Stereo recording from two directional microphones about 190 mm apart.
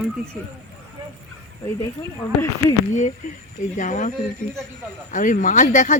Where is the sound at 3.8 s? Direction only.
40° left (ahead or behind).